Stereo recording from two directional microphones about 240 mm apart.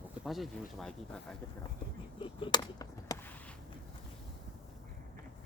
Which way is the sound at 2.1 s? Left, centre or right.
Left.